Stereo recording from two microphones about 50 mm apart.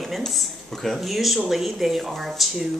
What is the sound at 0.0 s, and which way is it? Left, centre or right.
A woman's voice, centre.